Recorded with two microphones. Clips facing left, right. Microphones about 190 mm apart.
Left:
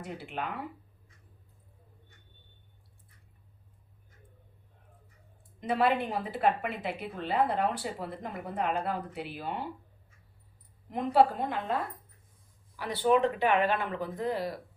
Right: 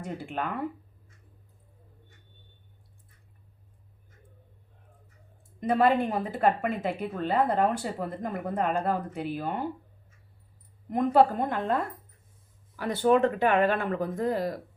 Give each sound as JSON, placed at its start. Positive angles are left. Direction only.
{"t": 0.0, "sound": "speech", "side_deg": -45}
{"t": 5.5, "sound": "speech", "side_deg": -45}
{"t": 10.8, "sound": "speech", "side_deg": -45}